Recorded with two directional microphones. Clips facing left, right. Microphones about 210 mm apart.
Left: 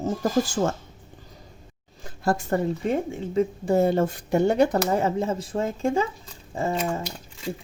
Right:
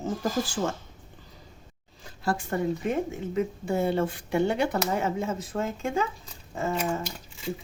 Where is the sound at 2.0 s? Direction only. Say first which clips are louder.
Left 4 dB; 45° left (ahead or behind).